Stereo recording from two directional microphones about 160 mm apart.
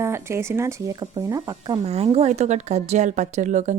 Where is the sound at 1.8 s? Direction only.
40° right (ahead or behind).